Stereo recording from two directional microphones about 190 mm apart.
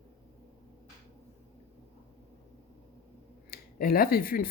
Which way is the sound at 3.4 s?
50° left (ahead or behind).